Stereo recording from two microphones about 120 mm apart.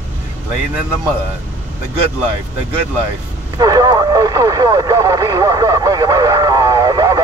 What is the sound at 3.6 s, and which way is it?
Speech, 35° right (ahead or behind).